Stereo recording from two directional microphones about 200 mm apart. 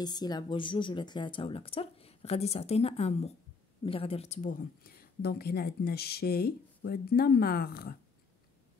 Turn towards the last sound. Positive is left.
turn(degrees=50)  # may be behind; listen again after turning